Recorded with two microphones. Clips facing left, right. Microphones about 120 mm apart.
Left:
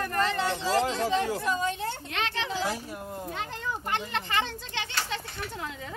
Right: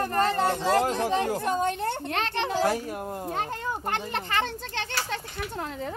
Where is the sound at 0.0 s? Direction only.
40° right (ahead or behind).